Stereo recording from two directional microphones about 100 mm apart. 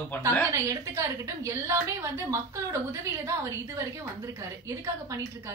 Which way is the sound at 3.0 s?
30° right (ahead or behind).